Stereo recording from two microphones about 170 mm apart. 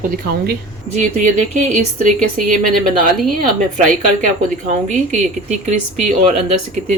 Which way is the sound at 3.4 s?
50° right (ahead or behind).